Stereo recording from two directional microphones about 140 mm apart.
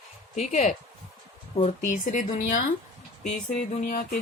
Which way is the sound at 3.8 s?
90° left.